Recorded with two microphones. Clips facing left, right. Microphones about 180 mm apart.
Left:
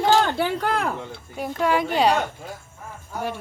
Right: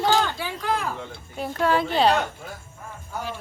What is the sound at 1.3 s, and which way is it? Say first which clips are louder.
Speech: even; 10° left (ahead or behind).